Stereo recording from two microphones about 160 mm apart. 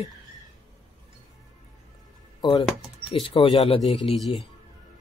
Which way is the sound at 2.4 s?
30° left (ahead or behind).